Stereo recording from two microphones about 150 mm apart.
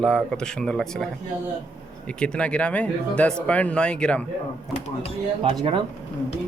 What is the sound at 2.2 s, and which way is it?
Speech, 10° left (ahead or behind).